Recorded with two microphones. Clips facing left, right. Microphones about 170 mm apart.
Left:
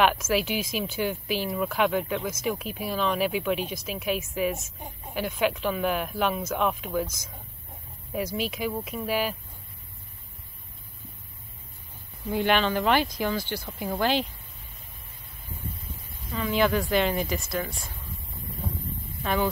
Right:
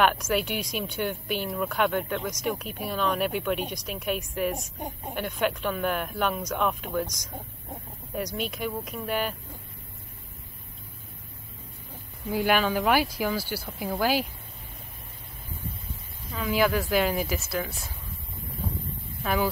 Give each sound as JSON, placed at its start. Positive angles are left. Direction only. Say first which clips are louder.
{"t": 0.0, "sound": "speech", "louder": "left 1 dB", "side_deg": 0}
{"t": 12.3, "sound": "speech", "louder": "even", "side_deg": -5}
{"t": 16.3, "sound": "speech", "louder": "even", "side_deg": -5}
{"t": 19.2, "sound": "speech", "louder": "even", "side_deg": -5}